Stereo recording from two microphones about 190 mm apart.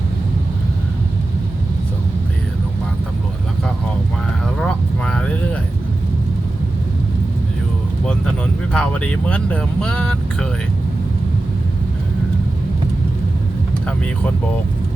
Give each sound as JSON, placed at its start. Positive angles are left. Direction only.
{"t": 4.5, "sound": "vehicle", "side_deg": 5}
{"t": 8.7, "sound": "speech", "side_deg": 5}